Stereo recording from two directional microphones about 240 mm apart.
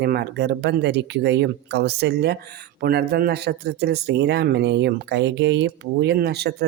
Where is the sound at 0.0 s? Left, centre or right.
Right.